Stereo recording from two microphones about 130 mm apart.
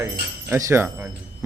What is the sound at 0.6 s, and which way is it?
Speech, 20° right (ahead or behind).